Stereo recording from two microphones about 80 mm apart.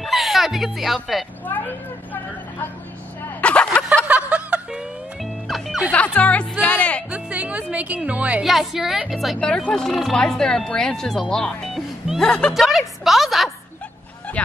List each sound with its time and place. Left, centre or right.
0.0 s music: centre
1.5 s vehicle: left
3.3 s vehicle: centre
4.1 s snicker: centre
5.2 s music: centre
5.9 s speech: centre
6.6 s music: centre
7.1 s music: centre
8.5 s speech: centre
9.4 s speech: centre
12.5 s a woman's voice: centre